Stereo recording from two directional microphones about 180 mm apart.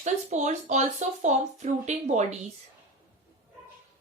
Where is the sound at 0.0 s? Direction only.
40° right (ahead or behind).